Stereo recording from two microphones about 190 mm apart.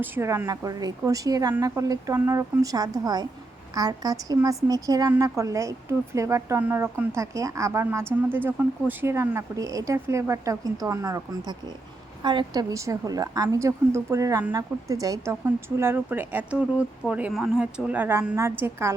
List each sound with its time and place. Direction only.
0.0 s a woman's voice: 10° right (ahead or behind)